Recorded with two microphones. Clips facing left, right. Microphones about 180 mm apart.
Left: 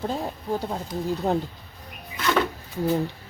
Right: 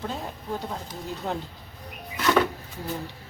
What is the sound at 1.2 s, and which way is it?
Speech, 35° left (ahead or behind).